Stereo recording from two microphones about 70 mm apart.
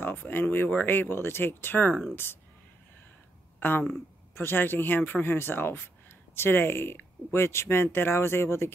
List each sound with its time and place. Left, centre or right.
0.0 s speech: left
3.5 s speech: left